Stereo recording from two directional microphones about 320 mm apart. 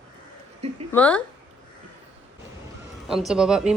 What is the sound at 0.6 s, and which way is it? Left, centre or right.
Speech, centre.